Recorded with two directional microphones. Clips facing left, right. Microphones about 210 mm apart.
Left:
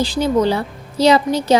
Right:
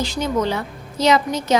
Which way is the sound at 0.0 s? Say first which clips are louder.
Left 5 dB; 30° left (ahead or behind).